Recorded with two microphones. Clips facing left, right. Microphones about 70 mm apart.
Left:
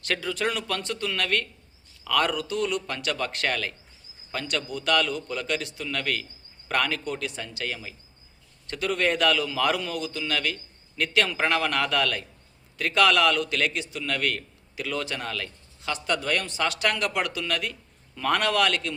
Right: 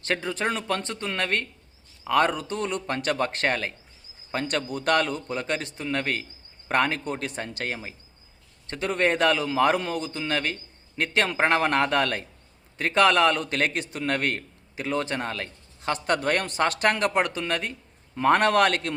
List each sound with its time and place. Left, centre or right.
0.0 s a man's voice: right